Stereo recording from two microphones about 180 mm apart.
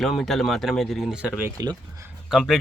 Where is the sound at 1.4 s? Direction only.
15° right (ahead or behind).